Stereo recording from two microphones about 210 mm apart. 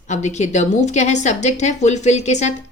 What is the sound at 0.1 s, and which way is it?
A woman's voice, 35° left (ahead or behind).